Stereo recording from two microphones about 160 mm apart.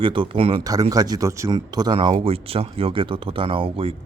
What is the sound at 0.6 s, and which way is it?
Speech, 20° right (ahead or behind).